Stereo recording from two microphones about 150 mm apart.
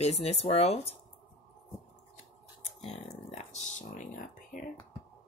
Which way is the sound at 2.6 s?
50° left (ahead or behind).